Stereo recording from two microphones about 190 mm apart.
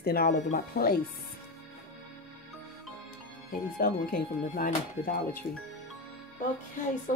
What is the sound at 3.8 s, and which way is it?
Speech, 50° left (ahead or behind).